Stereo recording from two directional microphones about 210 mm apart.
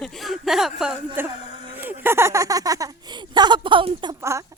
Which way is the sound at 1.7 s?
10° right (ahead or behind).